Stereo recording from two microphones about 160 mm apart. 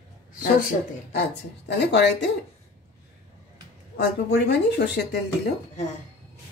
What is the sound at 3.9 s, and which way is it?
Speech, 90° left.